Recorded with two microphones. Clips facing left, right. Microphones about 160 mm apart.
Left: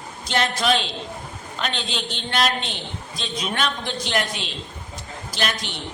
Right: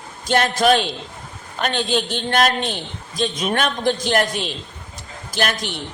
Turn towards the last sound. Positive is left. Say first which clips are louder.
# right 4 dB
turn(degrees=-50)  # may be behind; listen again after turning